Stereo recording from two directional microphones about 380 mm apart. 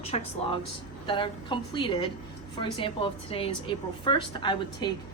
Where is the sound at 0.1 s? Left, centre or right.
Centre.